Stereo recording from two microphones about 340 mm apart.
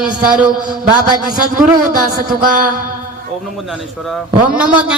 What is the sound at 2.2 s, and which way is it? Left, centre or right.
Music, right.